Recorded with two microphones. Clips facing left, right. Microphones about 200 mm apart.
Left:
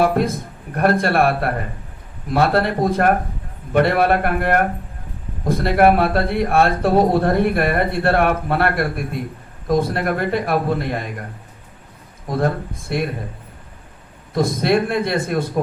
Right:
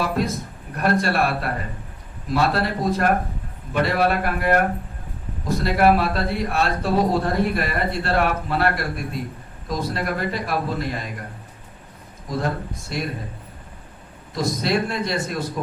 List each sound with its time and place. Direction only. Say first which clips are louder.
0.0 s a man's voice: left 6 dB; 55° left (ahead or behind)
12.3 s speech: left 5 dB; 55° left (ahead or behind)
14.6 s speech: left 5 dB; 55° left (ahead or behind)